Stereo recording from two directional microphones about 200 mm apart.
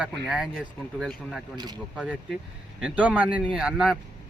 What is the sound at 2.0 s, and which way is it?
A man's voice, 5° right (ahead or behind).